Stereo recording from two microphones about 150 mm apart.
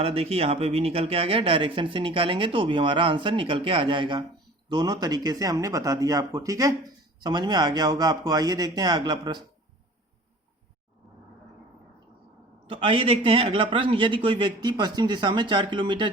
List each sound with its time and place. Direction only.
0.0 s speech: 40° right (ahead or behind)
12.6 s speech: 35° right (ahead or behind)